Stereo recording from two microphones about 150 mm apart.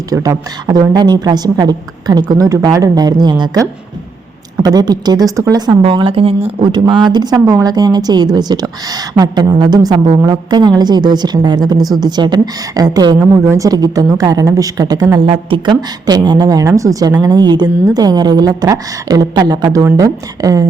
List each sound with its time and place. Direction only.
0.1 s a woman's voice: 25° right (ahead or behind)